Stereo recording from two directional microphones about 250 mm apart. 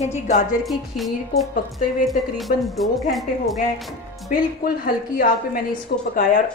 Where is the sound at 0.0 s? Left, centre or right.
Left.